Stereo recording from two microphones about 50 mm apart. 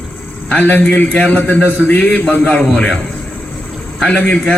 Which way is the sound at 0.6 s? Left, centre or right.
Left.